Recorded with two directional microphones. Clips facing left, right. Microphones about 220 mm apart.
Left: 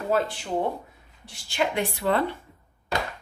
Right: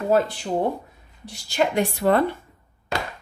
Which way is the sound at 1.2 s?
40° right (ahead or behind).